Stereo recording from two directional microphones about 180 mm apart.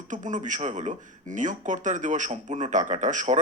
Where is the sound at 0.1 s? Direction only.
45° right (ahead or behind).